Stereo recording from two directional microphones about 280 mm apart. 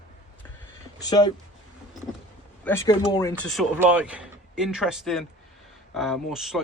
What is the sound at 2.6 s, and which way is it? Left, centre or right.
Speech, centre.